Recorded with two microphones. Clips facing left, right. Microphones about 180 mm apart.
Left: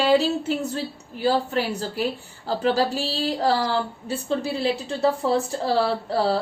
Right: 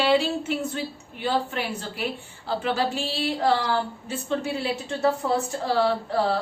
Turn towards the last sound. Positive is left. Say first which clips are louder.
# left 2 dB
turn(degrees=35)  # may be behind; listen again after turning